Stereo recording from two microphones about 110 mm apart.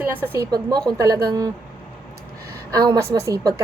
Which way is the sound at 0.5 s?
40° right (ahead or behind).